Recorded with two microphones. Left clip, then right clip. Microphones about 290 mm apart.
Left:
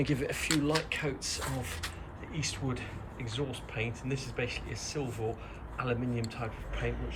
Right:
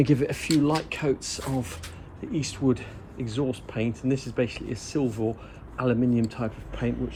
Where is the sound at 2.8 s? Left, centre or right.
Right.